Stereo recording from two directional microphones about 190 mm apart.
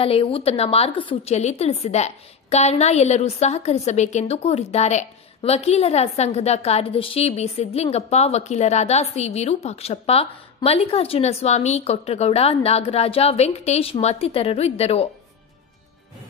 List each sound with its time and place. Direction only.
0.0 s a woman's voice: 30° left (ahead or behind)